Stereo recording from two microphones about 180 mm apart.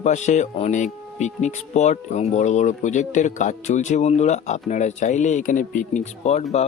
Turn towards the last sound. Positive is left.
turn(degrees=35)  # may be behind; listen again after turning